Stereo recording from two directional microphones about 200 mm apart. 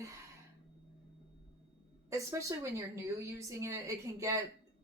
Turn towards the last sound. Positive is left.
turn(degrees=-15)  # may be behind; listen again after turning